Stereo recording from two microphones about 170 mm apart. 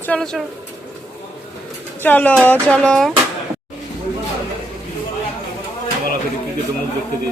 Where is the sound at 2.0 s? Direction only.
10° left (ahead or behind).